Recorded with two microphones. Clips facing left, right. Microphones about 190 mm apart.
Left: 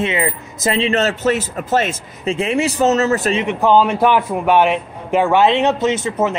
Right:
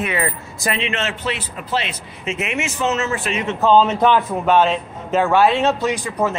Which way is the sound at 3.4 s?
15° left (ahead or behind).